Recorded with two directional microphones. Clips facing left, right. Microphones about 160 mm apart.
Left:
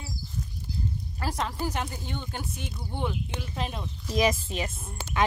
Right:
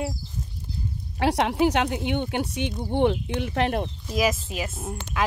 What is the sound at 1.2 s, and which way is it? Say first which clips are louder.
Speech: right 10 dB; 75° right (ahead or behind).